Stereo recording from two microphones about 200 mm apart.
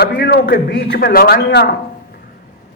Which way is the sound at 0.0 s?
50° left (ahead or behind).